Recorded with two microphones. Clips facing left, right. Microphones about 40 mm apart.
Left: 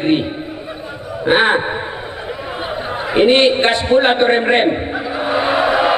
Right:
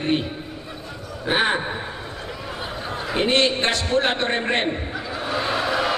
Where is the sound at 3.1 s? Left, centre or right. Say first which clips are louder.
Left 9 dB; left.